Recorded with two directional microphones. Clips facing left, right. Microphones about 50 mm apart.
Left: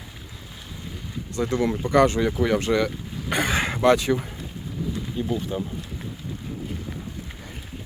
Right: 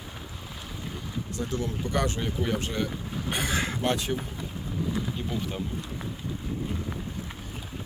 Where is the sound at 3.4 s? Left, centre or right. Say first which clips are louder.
Left 5 dB; left.